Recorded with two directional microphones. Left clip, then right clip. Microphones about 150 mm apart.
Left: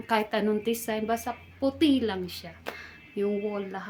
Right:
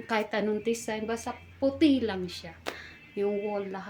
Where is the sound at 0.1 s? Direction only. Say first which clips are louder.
Left 3 dB; 20° left (ahead or behind).